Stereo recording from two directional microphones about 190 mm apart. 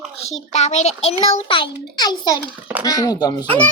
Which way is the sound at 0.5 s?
35° left (ahead or behind).